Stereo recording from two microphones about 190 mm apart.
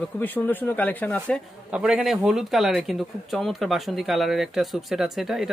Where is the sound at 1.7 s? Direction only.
5° right (ahead or behind).